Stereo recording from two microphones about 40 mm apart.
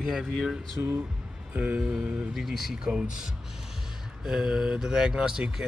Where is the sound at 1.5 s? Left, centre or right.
Right.